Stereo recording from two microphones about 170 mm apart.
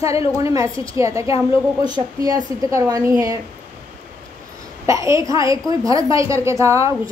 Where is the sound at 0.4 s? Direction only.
20° right (ahead or behind).